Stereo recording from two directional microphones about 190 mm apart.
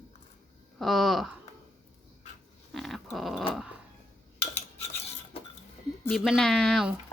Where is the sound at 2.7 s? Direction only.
Centre (ahead or behind).